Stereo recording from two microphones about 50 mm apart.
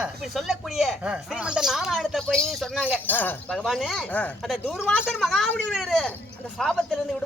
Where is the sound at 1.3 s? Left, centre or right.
Centre.